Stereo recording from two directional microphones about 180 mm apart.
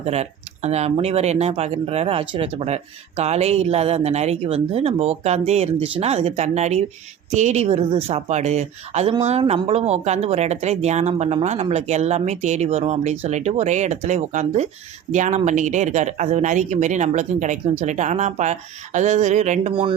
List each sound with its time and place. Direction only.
0.0 s speech: 35° right (ahead or behind)